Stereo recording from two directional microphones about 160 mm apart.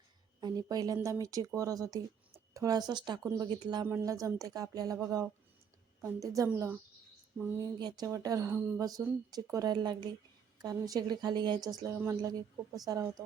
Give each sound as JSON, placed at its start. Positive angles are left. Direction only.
{"t": 0.3, "sound": "a woman's voice", "side_deg": -25}
{"t": 3.2, "sound": "speech", "side_deg": -15}